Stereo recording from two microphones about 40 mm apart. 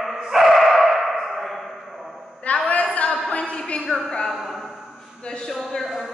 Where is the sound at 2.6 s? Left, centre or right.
Left.